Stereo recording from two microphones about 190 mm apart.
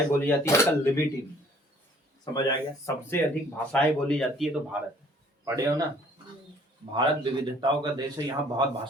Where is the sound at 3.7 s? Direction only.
5° left (ahead or behind).